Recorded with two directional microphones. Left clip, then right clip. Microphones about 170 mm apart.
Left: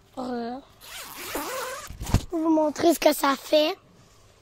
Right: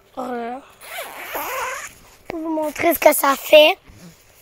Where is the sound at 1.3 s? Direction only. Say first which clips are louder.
Right 5 dB; 75° left (ahead or behind).